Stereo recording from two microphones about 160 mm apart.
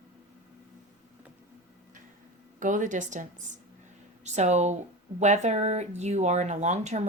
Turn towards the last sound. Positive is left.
turn(degrees=-45)  # may be behind; listen again after turning